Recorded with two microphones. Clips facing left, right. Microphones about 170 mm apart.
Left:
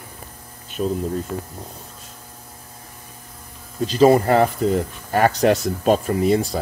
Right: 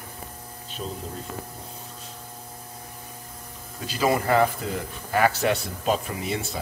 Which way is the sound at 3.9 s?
35° left (ahead or behind).